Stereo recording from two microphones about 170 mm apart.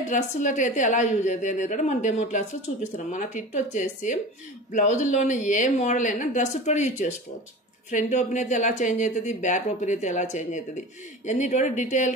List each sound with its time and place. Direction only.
0.1 s a woman's voice: 45° left (ahead or behind)